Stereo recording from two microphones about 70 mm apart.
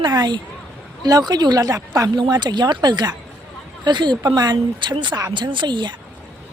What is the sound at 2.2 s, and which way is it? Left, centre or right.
Speech, right.